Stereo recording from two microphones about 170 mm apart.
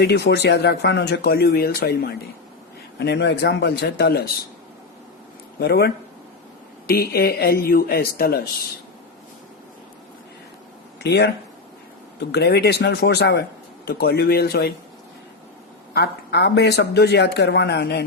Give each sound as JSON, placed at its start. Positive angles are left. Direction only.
{"t": 0.0, "sound": "speech", "side_deg": 80}
{"t": 3.0, "sound": "speech", "side_deg": 80}
{"t": 5.5, "sound": "speech", "side_deg": 70}
{"t": 11.0, "sound": "speech", "side_deg": 80}
{"t": 12.3, "sound": "speech", "side_deg": 75}
{"t": 15.9, "sound": "speech", "side_deg": 75}